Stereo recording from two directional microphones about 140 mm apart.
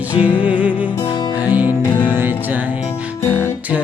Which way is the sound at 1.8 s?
10° left (ahead or behind).